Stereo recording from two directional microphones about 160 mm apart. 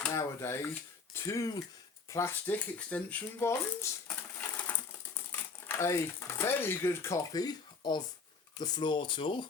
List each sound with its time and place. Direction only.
0.0 s a sound: 15° left (ahead or behind)
1.1 s speech: 20° left (ahead or behind)
5.3 s speech: 15° left (ahead or behind); by 9.5 s 30° left (ahead or behind)